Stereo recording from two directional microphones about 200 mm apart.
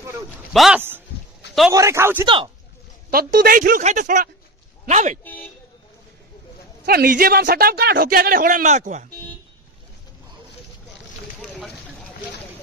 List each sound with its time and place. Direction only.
0.5 s a man's voice: centre (ahead or behind)
2.2 s speech: 25° right (ahead or behind)
3.1 s speech: 50° right (ahead or behind)
5.2 s vehicle: 10° left (ahead or behind)
6.9 s speech: 50° right (ahead or behind)
11.5 s a sound: 5° left (ahead or behind)